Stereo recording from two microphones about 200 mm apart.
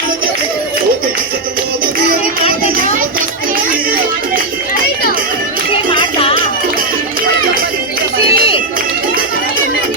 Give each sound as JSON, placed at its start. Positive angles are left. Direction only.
{"t": 5.7, "sound": "music", "side_deg": 25}
{"t": 8.3, "sound": "run", "side_deg": 25}